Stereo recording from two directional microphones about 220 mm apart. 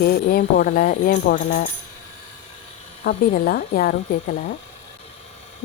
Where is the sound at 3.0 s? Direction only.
45° left (ahead or behind).